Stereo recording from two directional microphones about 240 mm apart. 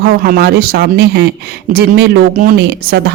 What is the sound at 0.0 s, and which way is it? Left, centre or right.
Speech, right.